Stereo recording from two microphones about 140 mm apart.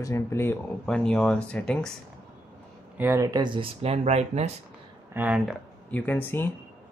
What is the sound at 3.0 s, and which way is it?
Speech, 20° right (ahead or behind).